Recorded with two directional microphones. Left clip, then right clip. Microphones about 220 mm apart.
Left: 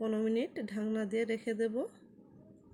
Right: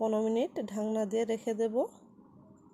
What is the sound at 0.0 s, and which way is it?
Speech, 5° right (ahead or behind).